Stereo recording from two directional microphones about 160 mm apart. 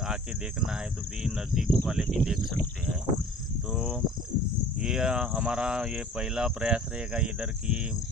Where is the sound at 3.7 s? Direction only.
5° right (ahead or behind).